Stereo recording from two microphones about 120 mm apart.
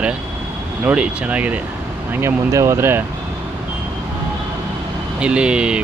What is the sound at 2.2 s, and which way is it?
Speech, 25° right (ahead or behind).